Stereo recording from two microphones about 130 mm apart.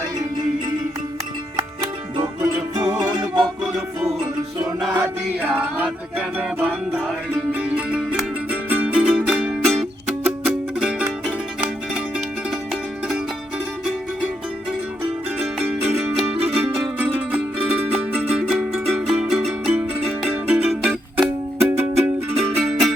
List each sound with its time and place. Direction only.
2.2 s music: 25° right (ahead or behind)
3.4 s music: 5° right (ahead or behind)
6.6 s music: 5° left (ahead or behind)
7.5 s music: 10° right (ahead or behind)
15.4 s music: 10° right (ahead or behind)
18.7 s music: centre (ahead or behind)
20.1 s music: 15° right (ahead or behind)
21.2 s music: 15° right (ahead or behind)
22.4 s music: centre (ahead or behind)